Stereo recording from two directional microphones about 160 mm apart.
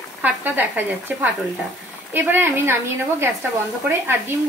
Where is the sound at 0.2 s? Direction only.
10° right (ahead or behind).